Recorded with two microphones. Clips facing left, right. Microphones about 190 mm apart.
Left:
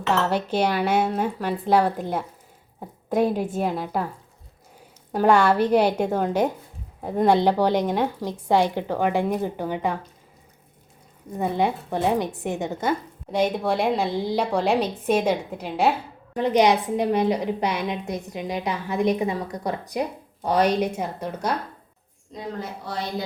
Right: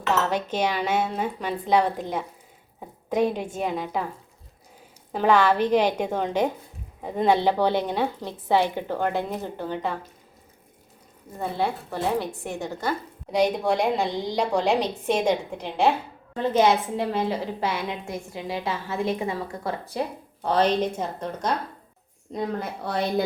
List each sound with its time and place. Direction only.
0.1 s a woman's voice: 10° left (ahead or behind)
5.1 s a woman's voice: 10° left (ahead or behind)
11.3 s a woman's voice: 15° left (ahead or behind)
13.3 s a woman's voice: centre (ahead or behind)
22.9 s a woman's voice: 60° right (ahead or behind)